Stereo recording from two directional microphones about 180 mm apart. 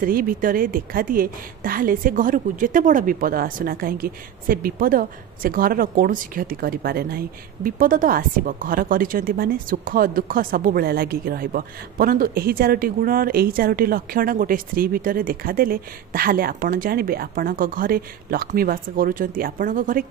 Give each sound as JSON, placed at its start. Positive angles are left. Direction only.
{"t": 0.0, "sound": "a woman's voice", "side_deg": -50}